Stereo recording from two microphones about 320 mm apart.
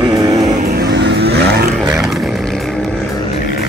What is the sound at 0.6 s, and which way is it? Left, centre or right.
Vehicle, right.